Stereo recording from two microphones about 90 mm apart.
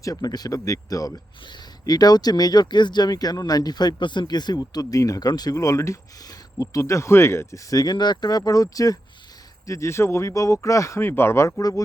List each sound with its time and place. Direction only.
0.0 s speech: 40° left (ahead or behind)